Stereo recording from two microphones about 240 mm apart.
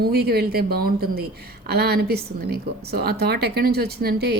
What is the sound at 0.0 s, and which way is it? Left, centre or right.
A woman's voice, right.